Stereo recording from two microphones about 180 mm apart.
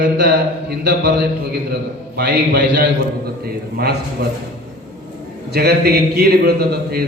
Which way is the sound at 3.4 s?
60° right (ahead or behind).